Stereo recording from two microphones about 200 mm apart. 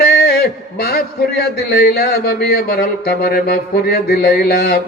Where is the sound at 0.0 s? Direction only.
50° left (ahead or behind).